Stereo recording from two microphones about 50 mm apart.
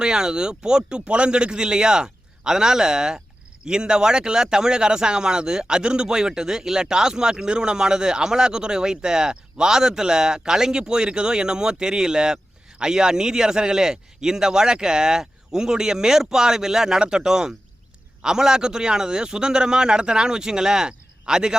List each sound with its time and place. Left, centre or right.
0.0 s speech: centre